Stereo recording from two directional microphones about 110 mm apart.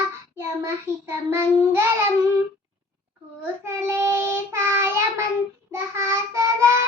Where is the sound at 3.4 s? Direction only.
20° right (ahead or behind).